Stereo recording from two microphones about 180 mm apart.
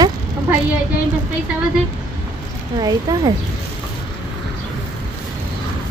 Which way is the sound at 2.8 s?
20° right (ahead or behind).